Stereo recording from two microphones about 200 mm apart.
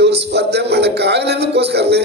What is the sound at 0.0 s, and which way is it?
A man's voice, 55° right (ahead or behind).